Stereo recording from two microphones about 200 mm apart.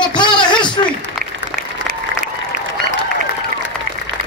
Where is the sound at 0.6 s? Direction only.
25° left (ahead or behind).